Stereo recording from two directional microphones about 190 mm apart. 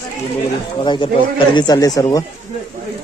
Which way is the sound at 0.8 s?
25° left (ahead or behind).